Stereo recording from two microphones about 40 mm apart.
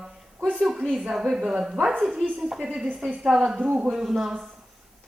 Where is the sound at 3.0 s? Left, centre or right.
Right.